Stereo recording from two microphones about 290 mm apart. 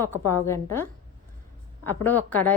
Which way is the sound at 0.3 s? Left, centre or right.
Centre.